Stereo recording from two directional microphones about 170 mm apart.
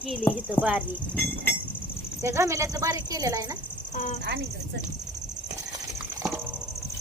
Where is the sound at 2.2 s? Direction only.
15° right (ahead or behind).